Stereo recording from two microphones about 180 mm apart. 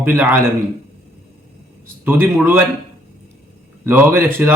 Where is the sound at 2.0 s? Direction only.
10° right (ahead or behind).